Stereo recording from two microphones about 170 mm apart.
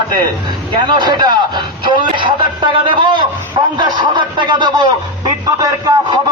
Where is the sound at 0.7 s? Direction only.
25° right (ahead or behind).